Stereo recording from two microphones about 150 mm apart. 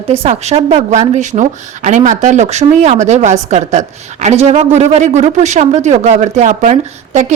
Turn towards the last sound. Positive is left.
turn(degrees=-50)  # may be behind; listen again after turning